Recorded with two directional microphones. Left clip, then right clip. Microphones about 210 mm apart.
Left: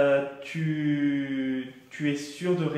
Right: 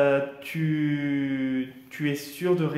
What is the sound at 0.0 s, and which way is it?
Mantra, 45° right (ahead or behind).